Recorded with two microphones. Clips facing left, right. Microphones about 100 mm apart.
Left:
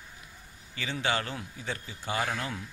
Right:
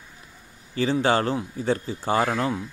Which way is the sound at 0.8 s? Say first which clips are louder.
Right 10 dB; 35° right (ahead or behind).